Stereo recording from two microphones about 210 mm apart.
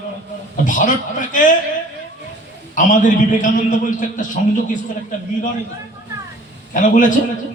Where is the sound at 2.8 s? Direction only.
40° left (ahead or behind).